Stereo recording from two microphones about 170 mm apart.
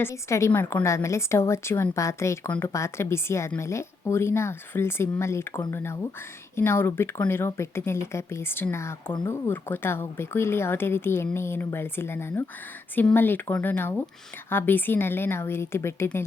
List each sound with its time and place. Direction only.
0.0 s a woman's voice: 15° left (ahead or behind)